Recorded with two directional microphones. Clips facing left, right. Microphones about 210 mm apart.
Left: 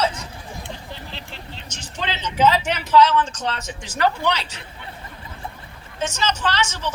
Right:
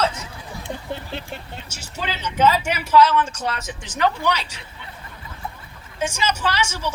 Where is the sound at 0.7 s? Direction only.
50° right (ahead or behind).